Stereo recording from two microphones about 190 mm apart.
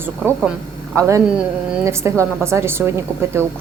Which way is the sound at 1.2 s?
5° right (ahead or behind).